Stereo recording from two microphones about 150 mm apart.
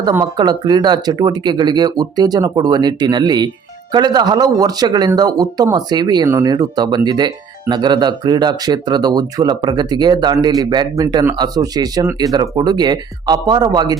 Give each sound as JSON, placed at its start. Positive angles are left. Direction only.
{"t": 0.0, "sound": "speech", "side_deg": -15}
{"t": 0.3, "sound": "speech", "side_deg": -30}